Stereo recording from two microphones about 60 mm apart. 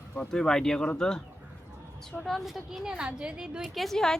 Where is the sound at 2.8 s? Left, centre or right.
Centre.